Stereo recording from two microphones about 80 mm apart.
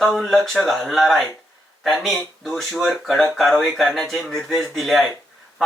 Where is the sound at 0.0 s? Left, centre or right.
Centre.